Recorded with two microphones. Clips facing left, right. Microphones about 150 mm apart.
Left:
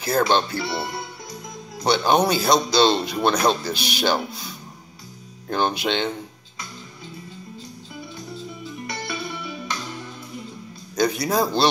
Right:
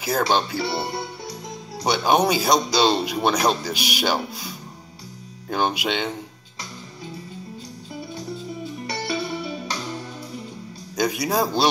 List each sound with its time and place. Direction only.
0.3 s speech: 10° right (ahead or behind)
0.7 s speech: 35° right (ahead or behind)
1.9 s speech: 10° right (ahead or behind)
8.0 s music: 35° right (ahead or behind)
11.0 s speech: 10° right (ahead or behind)